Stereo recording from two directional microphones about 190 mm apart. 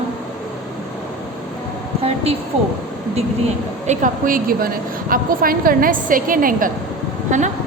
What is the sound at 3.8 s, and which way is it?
A woman's voice, 45° right (ahead or behind).